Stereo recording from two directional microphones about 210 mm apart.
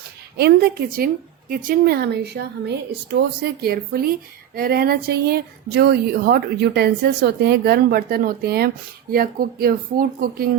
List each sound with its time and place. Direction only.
0.3 s speech: 50° right (ahead or behind)